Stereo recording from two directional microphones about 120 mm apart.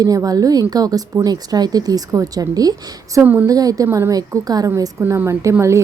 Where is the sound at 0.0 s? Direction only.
30° right (ahead or behind).